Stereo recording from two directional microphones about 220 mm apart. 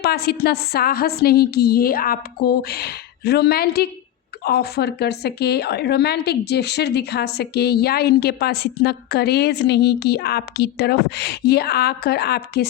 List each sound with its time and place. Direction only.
0.0 s speech: 45° left (ahead or behind)